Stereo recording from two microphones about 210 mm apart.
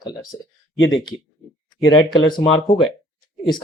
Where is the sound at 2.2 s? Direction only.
25° left (ahead or behind).